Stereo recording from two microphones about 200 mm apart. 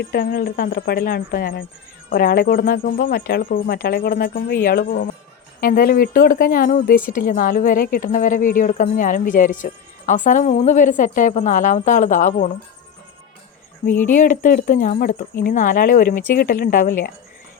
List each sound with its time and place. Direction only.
0.0 s speech: 50° left (ahead or behind)
14.1 s speech: 40° left (ahead or behind)